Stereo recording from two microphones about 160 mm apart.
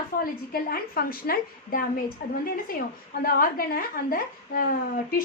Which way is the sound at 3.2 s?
65° left (ahead or behind).